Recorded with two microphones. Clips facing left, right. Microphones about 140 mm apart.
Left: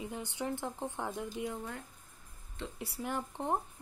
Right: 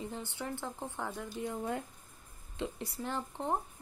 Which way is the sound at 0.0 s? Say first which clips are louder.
Left 2 dB; 15° left (ahead or behind).